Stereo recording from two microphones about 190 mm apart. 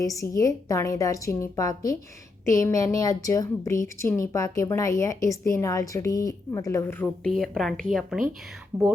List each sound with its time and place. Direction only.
0.0 s a woman's voice: 15° left (ahead or behind)
7.3 s a woman's voice: centre (ahead or behind)